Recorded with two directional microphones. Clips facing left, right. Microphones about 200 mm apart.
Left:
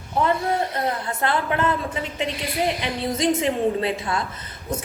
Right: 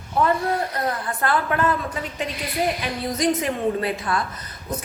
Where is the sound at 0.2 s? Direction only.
25° left (ahead or behind).